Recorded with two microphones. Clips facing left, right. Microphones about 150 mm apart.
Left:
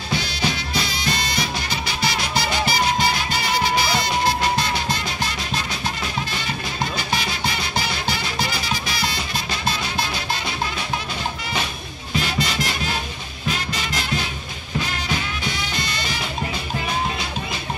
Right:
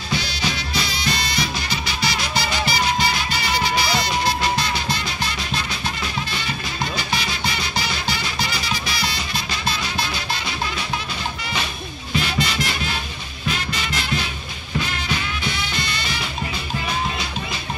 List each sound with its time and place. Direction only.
0.1 s music: 50° left (ahead or behind)
7.0 s music: 45° left (ahead or behind)
12.2 s music: 40° left (ahead or behind)